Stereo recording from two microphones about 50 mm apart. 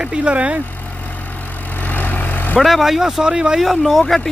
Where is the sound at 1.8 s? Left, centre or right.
Left.